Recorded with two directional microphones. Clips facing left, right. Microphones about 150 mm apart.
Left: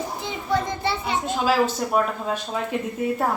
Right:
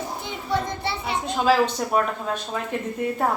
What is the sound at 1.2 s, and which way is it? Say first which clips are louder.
Speech: right 2 dB; centre (ahead or behind).